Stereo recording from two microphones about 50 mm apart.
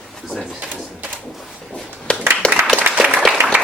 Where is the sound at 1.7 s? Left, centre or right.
Centre.